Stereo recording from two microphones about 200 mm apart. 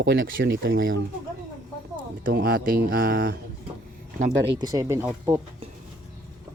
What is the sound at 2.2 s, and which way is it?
Speech, 45° right (ahead or behind).